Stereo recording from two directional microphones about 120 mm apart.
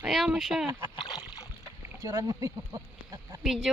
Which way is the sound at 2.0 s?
30° right (ahead or behind).